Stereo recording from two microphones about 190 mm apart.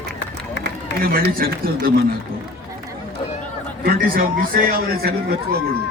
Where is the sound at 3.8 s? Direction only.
60° right (ahead or behind).